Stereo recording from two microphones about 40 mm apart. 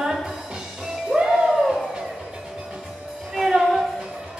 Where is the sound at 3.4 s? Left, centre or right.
Centre.